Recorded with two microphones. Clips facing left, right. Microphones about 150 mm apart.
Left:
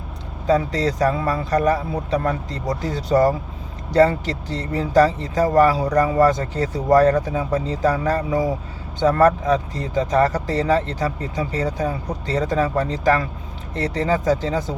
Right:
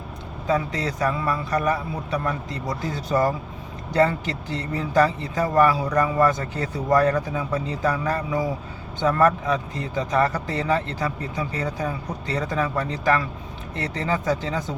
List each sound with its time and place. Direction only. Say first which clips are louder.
0.4 s speech: left 5 dB; 35° left (ahead or behind)